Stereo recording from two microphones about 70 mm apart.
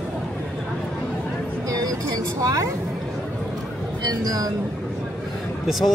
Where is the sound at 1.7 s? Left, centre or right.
Right.